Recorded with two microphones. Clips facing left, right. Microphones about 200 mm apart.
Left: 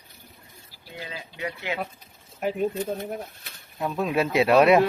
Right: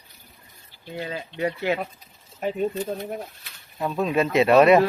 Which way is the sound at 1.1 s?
45° right (ahead or behind).